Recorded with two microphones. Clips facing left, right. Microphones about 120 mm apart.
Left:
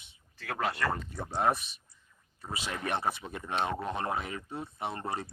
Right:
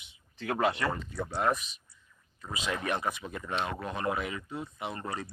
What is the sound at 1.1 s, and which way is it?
Speech, 30° left (ahead or behind).